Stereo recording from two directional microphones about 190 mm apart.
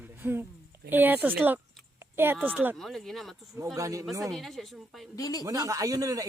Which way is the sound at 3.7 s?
15° right (ahead or behind).